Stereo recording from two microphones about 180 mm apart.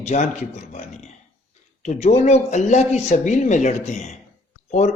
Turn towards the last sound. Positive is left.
turn(degrees=40)  # may be behind; listen again after turning